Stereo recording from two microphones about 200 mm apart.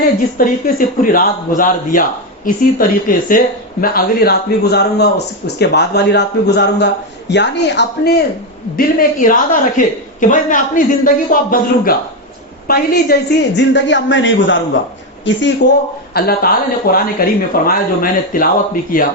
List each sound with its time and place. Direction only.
0.3 s a man's voice: 45° left (ahead or behind)
8.7 s a woman's voice: 45° left (ahead or behind)
13.6 s speech: 65° left (ahead or behind)
16.1 s a man's voice: 50° left (ahead or behind)